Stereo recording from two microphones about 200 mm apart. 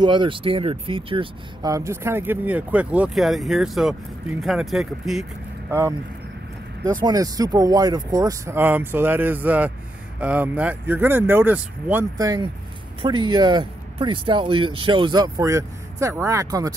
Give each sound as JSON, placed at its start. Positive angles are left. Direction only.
{"t": 0.0, "sound": "speech", "side_deg": -25}
{"t": 5.7, "sound": "speech", "side_deg": -15}
{"t": 7.0, "sound": "speech", "side_deg": -20}